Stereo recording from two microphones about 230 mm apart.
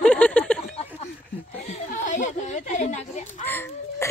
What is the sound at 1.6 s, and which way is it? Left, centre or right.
Speech, left.